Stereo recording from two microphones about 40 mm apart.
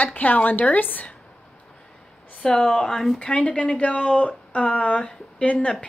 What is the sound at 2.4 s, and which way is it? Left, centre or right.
Speech, left.